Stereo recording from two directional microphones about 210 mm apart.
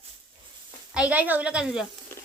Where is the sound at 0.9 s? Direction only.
5° right (ahead or behind).